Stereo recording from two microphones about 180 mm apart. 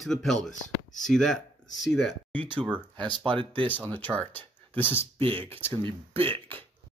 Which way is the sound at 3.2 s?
30° right (ahead or behind).